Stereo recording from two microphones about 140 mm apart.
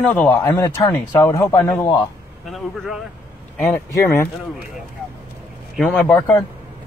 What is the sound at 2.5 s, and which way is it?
Speech, centre (ahead or behind).